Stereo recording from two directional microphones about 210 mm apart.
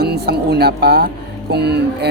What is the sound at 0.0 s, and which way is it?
Speech, 50° right (ahead or behind).